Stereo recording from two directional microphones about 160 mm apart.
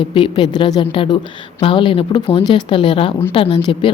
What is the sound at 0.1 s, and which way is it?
Speech, 30° left (ahead or behind).